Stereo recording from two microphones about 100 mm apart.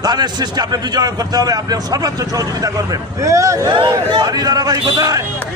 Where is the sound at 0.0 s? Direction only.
45° right (ahead or behind).